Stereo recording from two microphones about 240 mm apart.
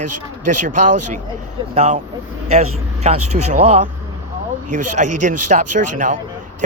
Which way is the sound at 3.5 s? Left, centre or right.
Right.